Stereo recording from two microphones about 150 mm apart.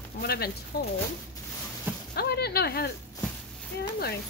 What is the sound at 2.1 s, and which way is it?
Speech, 90° left.